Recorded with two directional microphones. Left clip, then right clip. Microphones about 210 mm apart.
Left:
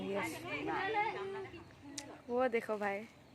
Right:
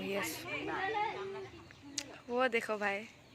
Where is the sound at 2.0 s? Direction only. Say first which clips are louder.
Right 6 dB; 10° left (ahead or behind).